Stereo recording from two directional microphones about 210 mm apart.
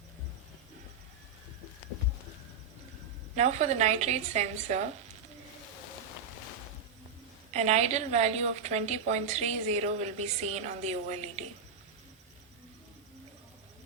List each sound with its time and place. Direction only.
3.3 s a woman's voice: 35° right (ahead or behind)
7.5 s a woman's voice: 30° right (ahead or behind)